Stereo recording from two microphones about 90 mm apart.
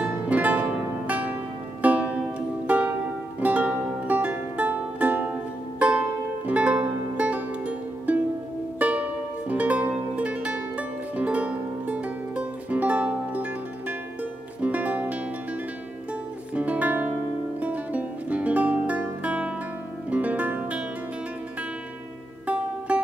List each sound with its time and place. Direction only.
0.0 s music: 15° right (ahead or behind)
16.5 s music: 15° right (ahead or behind)
22.9 s music: 15° right (ahead or behind)